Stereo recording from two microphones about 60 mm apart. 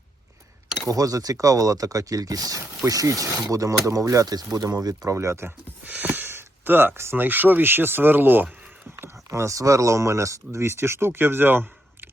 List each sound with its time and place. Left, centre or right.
0.9 s speech: right
5.1 s speech: right
5.8 s a sound: right
7.2 s speech: right
9.3 s speech: right